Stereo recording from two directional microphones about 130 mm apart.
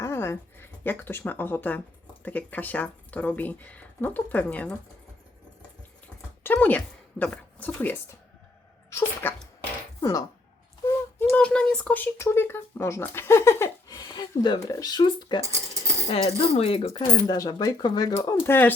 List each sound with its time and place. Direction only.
0.0 s speech: 20° left (ahead or behind)
6.4 s speech: 15° left (ahead or behind); by 10.2 s 30° left (ahead or behind)
11.2 s speech: 10° left (ahead or behind); by 15.4 s 35° left (ahead or behind)
16.0 s speech: 50° left (ahead or behind)
17.0 s speech: 30° left (ahead or behind)